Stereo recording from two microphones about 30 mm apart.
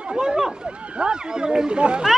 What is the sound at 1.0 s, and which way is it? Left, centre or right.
Speech, right.